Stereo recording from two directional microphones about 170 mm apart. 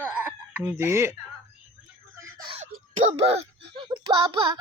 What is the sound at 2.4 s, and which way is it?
Wail, 35° right (ahead or behind).